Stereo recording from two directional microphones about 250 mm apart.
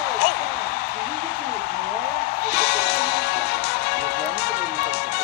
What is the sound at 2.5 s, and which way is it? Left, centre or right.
Music, left.